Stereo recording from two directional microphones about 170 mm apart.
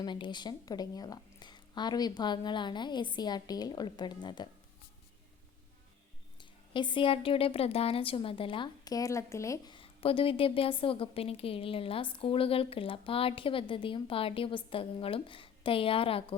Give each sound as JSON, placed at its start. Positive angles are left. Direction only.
{"t": 0.0, "sound": "a woman's voice", "side_deg": 25}
{"t": 6.4, "sound": "a woman's voice", "side_deg": 30}
{"t": 9.7, "sound": "a woman's voice", "side_deg": 35}